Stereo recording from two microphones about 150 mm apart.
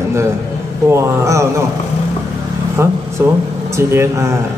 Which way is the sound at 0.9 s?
20° right (ahead or behind).